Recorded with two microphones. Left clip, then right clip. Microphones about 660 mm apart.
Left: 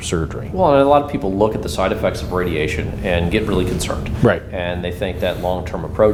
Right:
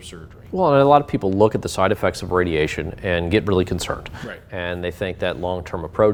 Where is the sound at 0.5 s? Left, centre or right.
Right.